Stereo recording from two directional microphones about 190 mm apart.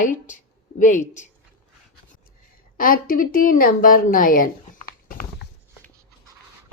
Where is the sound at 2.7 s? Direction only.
45° left (ahead or behind).